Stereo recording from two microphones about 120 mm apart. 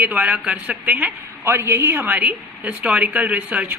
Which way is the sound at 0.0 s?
10° right (ahead or behind).